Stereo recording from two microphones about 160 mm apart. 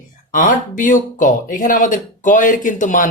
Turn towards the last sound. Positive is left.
turn(degrees=55)  # may be behind; listen again after turning